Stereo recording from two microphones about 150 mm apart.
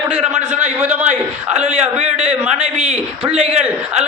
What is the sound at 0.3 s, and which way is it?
Speech, 50° right (ahead or behind).